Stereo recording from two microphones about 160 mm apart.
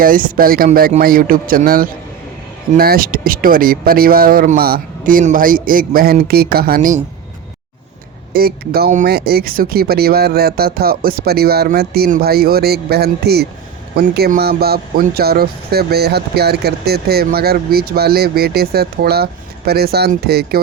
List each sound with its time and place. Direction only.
0.0 s speech: 60° right (ahead or behind)
8.3 s speech: 70° right (ahead or behind)